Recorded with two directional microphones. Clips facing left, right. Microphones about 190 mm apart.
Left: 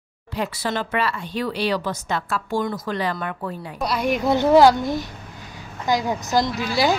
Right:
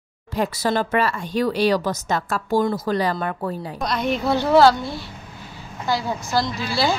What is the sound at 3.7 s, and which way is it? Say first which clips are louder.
A woman's voice: left 3 dB; 10° left (ahead or behind).